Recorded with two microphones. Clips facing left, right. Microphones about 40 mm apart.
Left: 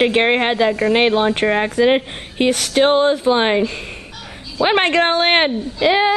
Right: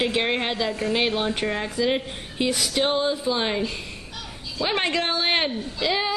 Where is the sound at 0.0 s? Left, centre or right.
Left.